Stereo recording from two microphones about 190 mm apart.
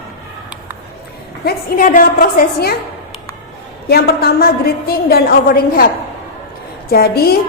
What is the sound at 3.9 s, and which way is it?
A woman's voice, 55° left (ahead or behind).